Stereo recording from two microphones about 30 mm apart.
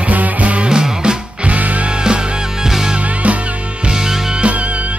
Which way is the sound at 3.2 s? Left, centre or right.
Right.